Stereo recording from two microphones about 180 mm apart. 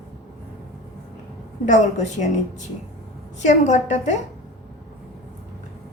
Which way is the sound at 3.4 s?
40° left (ahead or behind).